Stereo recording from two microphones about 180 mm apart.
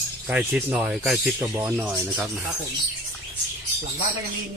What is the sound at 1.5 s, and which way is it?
Speech, 15° right (ahead or behind).